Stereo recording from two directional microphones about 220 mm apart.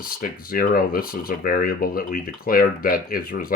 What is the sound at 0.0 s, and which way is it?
Speech, 40° left (ahead or behind).